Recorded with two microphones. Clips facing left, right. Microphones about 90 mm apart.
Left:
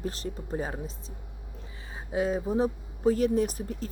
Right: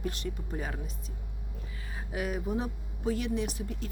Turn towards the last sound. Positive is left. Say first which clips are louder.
# left 5 dB
turn(degrees=40)  # may be behind; listen again after turning